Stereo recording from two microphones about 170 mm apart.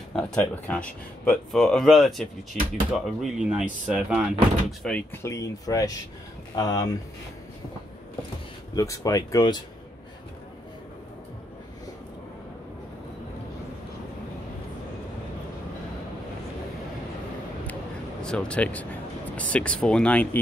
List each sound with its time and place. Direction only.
0.1 s speech: 5° left (ahead or behind)
8.7 s speech: 20° left (ahead or behind)
18.2 s speech: 5° left (ahead or behind)